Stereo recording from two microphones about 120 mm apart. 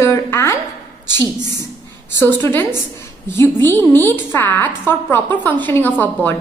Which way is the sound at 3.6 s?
15° left (ahead or behind).